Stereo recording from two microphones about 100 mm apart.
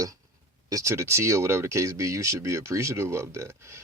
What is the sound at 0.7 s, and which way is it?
Speech, 30° right (ahead or behind).